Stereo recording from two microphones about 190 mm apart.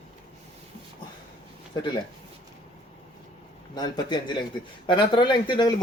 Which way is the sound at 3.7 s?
20° left (ahead or behind).